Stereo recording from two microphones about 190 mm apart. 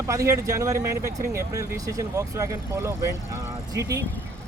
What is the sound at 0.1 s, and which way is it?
Speech, 15° right (ahead or behind).